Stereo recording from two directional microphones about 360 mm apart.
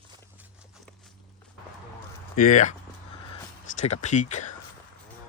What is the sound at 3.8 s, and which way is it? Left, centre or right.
Speech, centre.